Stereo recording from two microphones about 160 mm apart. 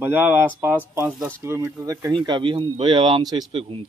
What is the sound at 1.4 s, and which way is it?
Speech, 15° right (ahead or behind).